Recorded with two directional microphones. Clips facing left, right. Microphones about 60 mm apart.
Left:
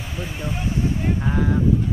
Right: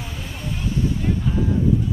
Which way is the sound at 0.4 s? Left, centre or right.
Left.